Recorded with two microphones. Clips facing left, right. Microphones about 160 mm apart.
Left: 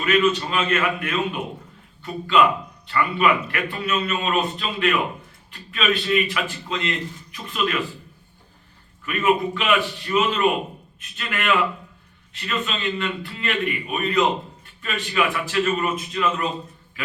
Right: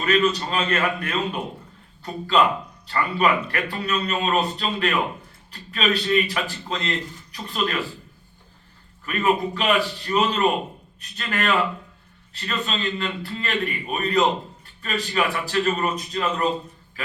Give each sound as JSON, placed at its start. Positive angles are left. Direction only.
{"t": 0.0, "sound": "speech", "side_deg": -40}
{"t": 9.0, "sound": "speech", "side_deg": -40}